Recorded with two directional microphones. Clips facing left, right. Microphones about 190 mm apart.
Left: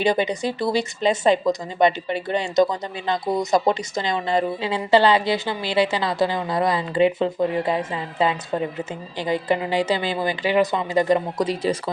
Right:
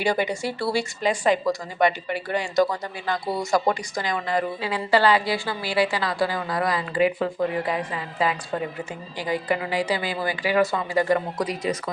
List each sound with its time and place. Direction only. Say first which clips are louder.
0.0 s speech: left 3 dB; 20° left (ahead or behind)